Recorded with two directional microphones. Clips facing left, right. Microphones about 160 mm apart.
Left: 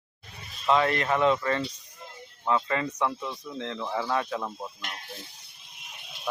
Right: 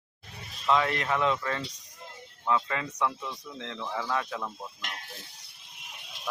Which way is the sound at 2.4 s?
20° left (ahead or behind).